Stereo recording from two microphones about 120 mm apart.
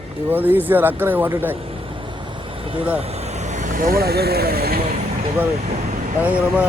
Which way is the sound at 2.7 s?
45° right (ahead or behind).